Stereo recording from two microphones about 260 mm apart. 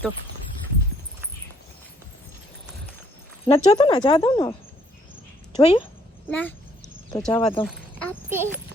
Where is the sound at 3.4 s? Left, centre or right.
Left.